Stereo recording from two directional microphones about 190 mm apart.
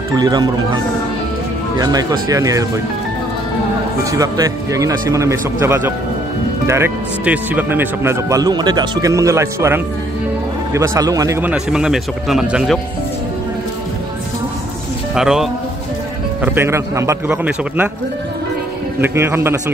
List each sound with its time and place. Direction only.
0.1 s speech: 20° right (ahead or behind)
1.8 s speech: 20° right (ahead or behind)
4.0 s a man's voice: 15° right (ahead or behind); by 12.8 s centre (ahead or behind)
15.1 s a man's voice: 5° right (ahead or behind)
18.9 s a man's voice: 10° right (ahead or behind)